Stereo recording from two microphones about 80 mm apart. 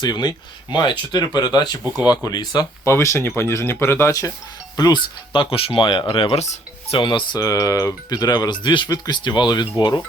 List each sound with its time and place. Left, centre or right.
0.0 s speech: left
2.8 s speech: left
4.8 s speech: left
7.3 s speech: left
8.9 s speech: left